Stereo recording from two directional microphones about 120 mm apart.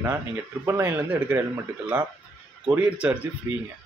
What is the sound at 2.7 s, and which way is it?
Speech, 10° right (ahead or behind).